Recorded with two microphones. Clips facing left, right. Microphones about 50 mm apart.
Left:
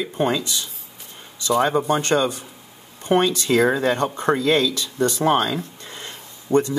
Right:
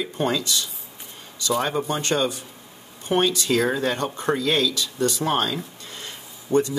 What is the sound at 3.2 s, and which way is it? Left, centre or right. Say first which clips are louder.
Speech: left 3 dB; left.